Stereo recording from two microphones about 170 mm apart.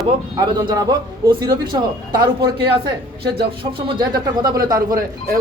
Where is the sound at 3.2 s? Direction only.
30° right (ahead or behind).